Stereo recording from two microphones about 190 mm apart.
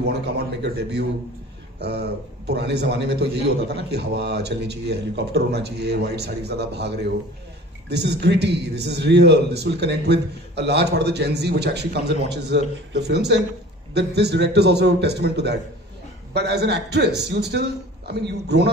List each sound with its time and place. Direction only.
0.0 s a man's voice: 55° right (ahead or behind)